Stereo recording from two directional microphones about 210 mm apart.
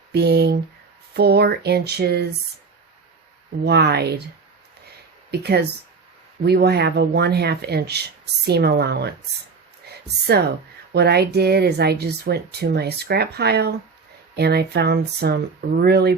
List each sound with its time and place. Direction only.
0.1 s a sound: 50° right (ahead or behind)
1.1 s speech: 50° right (ahead or behind)
3.6 s speech: 50° right (ahead or behind)
5.3 s speech: 50° right (ahead or behind)